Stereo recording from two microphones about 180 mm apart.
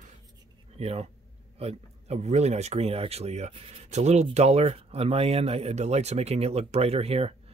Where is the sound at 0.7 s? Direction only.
35° right (ahead or behind).